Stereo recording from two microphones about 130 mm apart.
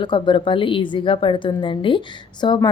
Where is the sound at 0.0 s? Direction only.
40° left (ahead or behind).